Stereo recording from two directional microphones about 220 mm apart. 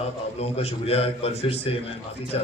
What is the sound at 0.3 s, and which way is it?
A man's voice, 30° left (ahead or behind).